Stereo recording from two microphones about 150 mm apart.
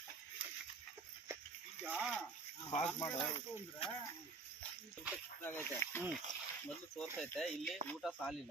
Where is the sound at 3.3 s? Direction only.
35° left (ahead or behind).